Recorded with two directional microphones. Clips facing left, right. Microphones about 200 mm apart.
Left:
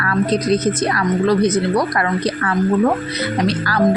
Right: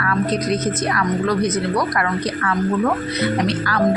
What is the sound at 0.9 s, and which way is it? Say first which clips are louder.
Speech: left 4 dB; 30° left (ahead or behind).